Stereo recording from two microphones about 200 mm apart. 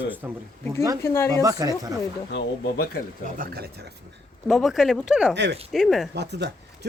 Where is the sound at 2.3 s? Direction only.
50° left (ahead or behind).